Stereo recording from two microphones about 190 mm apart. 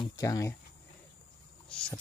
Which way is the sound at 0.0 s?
20° left (ahead or behind).